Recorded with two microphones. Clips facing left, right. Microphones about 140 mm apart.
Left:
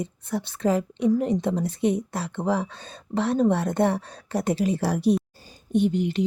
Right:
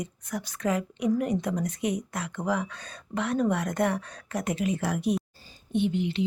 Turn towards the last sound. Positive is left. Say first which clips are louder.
# left 4 dB
turn(degrees=45)  # may be behind; listen again after turning